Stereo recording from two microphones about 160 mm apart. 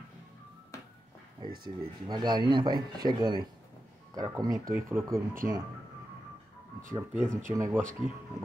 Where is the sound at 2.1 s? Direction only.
25° right (ahead or behind).